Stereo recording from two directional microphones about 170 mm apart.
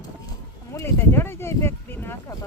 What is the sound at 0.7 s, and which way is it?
Speech, 15° left (ahead or behind).